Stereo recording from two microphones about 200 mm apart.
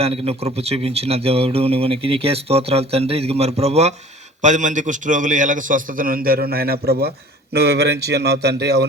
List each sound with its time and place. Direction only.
0.0 s a man's voice: 30° right (ahead or behind); by 8.9 s 55° right (ahead or behind)